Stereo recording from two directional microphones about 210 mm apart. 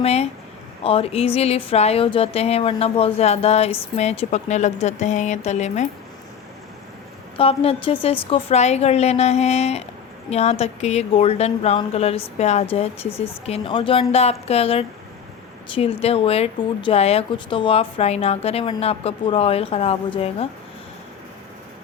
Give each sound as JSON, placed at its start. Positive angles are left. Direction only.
{"t": 0.0, "sound": "speech", "side_deg": 30}
{"t": 7.3, "sound": "speech", "side_deg": 25}
{"t": 13.1, "sound": "speech", "side_deg": 10}
{"t": 13.4, "sound": "speech", "side_deg": 25}